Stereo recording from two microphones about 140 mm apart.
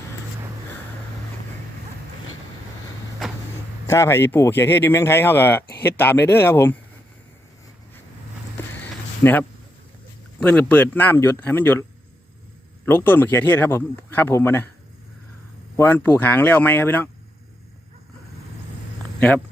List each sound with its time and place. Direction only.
3.8 s speech: 20° left (ahead or behind)
8.6 s a sound: 15° left (ahead or behind)
9.2 s speech: 20° left (ahead or behind)
10.4 s speech: 10° left (ahead or behind)
15.7 s speech: 15° left (ahead or behind)